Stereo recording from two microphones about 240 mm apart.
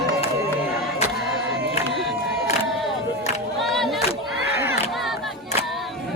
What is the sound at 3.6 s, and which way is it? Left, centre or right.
Crowd, centre.